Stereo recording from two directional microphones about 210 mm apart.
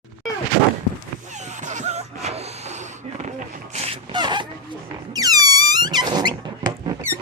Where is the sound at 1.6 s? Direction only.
35° right (ahead or behind).